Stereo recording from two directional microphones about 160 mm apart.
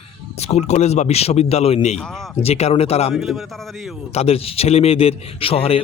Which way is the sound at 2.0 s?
5° left (ahead or behind).